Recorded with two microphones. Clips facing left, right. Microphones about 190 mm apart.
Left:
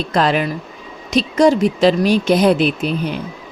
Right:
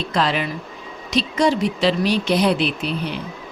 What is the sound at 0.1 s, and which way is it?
Speech, 50° left (ahead or behind).